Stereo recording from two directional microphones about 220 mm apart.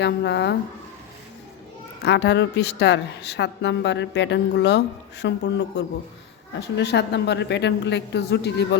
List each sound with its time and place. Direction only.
0.0 s a woman's voice: 50° left (ahead or behind)
2.0 s a woman's voice: 50° left (ahead or behind)